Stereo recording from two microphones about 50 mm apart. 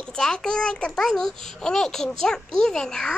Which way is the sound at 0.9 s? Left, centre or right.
Centre.